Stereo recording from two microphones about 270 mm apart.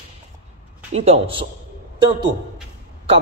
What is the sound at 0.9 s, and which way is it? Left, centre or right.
Speech, right.